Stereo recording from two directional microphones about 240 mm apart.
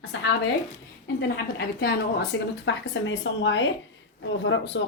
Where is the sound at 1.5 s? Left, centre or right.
Left.